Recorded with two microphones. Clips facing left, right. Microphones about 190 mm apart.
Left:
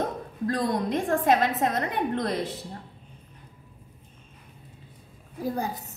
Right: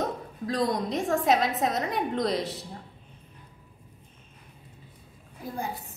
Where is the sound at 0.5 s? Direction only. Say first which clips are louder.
Left 1 dB; 55° left (ahead or behind).